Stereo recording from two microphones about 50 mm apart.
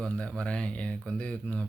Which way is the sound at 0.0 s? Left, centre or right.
Centre.